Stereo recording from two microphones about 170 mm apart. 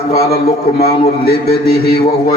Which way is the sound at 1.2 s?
65° left (ahead or behind).